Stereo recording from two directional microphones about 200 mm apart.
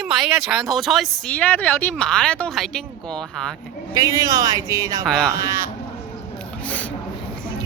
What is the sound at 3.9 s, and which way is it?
Speech, 15° right (ahead or behind).